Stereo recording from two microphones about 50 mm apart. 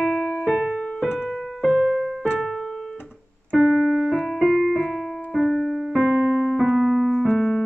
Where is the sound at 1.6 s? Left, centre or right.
Centre.